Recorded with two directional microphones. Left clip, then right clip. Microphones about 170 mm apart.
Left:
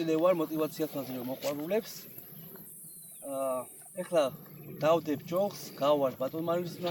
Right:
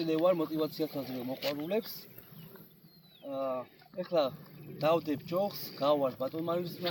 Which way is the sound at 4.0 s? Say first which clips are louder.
Left 2 dB; 5° left (ahead or behind).